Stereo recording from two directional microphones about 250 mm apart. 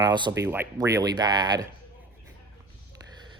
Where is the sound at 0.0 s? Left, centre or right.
Centre.